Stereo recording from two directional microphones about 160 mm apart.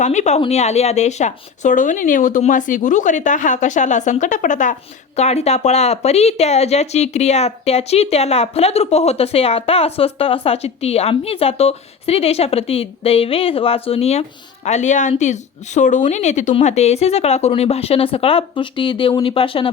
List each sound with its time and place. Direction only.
0.0 s speech: 45° left (ahead or behind)